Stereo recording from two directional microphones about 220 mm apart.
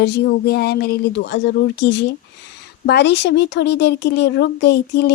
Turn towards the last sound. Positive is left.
turn(degrees=50)  # may be behind; listen again after turning